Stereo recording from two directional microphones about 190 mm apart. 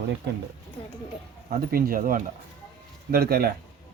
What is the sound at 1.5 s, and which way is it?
Speech, 50° right (ahead or behind).